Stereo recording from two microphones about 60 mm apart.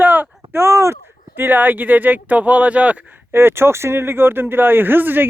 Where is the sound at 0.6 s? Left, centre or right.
Right.